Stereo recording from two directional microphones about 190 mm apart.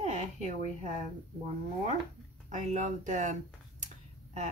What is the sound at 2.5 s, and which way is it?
Speech, 40° right (ahead or behind).